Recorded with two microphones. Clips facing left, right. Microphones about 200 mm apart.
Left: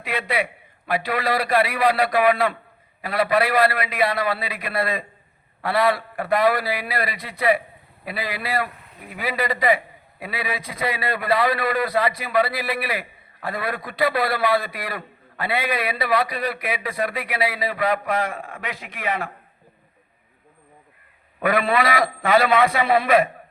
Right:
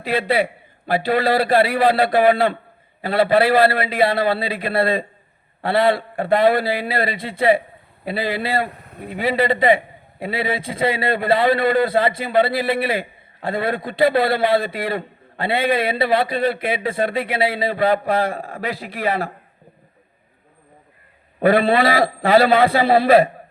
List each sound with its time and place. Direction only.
0.0 s a man's voice: 30° right (ahead or behind)
21.3 s a man's voice: 30° right (ahead or behind)